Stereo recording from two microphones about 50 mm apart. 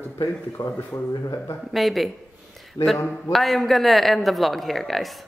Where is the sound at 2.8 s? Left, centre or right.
Left.